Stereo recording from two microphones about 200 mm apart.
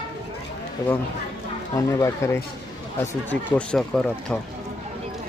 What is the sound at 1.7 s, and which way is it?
Speech, 15° left (ahead or behind).